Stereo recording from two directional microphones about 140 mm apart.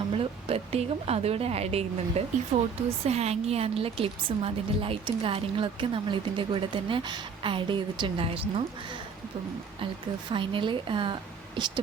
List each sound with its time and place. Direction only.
0.1 s a woman's voice: 45° right (ahead or behind)
10.3 s a woman's voice: 40° right (ahead or behind)